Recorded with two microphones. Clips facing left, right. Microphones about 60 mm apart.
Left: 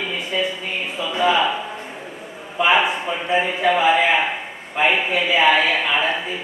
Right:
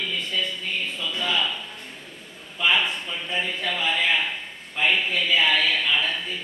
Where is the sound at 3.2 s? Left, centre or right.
Centre.